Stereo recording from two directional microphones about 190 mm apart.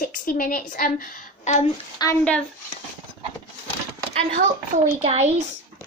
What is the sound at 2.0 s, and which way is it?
Speech, 20° left (ahead or behind).